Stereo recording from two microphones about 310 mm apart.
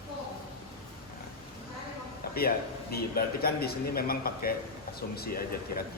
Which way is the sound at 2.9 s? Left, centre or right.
Left.